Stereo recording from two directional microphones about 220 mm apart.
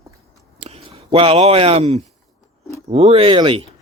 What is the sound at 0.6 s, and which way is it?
Speech, 25° right (ahead or behind).